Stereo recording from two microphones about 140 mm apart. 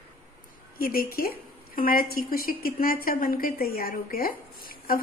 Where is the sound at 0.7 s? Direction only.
90° left.